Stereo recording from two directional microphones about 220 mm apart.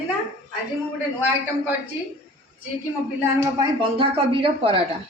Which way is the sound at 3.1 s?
20° right (ahead or behind).